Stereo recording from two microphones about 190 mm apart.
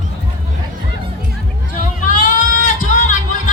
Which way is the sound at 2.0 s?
45° left (ahead or behind).